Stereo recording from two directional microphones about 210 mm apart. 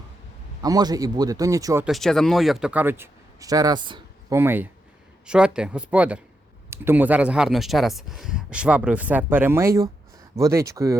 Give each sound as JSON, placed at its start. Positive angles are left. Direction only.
{"t": 0.6, "sound": "speech", "side_deg": -20}
{"t": 1.8, "sound": "speech", "side_deg": 0}